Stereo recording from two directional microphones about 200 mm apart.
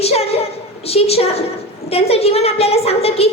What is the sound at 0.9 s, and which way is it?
A woman's voice, 30° left (ahead or behind).